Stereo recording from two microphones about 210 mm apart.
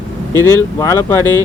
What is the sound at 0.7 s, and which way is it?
Speech, 15° left (ahead or behind).